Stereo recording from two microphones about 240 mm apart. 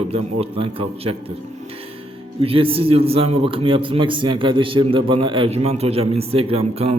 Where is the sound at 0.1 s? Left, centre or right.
Right.